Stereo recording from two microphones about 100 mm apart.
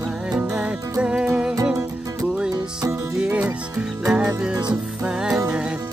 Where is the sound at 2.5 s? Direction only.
35° right (ahead or behind).